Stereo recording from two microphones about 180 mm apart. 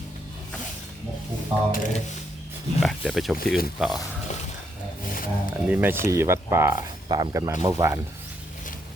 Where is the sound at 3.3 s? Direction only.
55° left (ahead or behind).